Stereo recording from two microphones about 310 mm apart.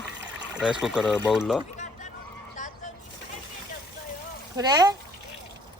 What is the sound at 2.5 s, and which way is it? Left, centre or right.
Vehicle, left.